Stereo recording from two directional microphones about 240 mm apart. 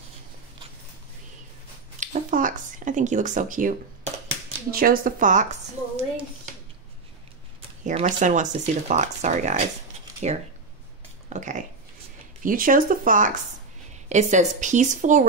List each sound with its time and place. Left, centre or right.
2.0 s speech: right
7.8 s speech: right
11.2 s speech: right